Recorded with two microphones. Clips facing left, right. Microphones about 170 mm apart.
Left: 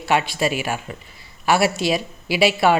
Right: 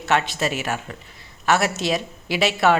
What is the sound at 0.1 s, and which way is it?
A woman's voice, 10° left (ahead or behind).